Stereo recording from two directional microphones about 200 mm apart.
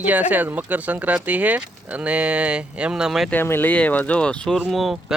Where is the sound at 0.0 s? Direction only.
10° right (ahead or behind).